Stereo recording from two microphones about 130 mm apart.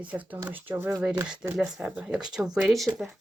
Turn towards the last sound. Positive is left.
turn(degrees=0)  # may be behind; listen again after turning